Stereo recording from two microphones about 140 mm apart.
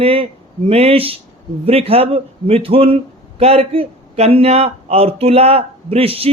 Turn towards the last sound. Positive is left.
turn(degrees=-45)  # may be behind; listen again after turning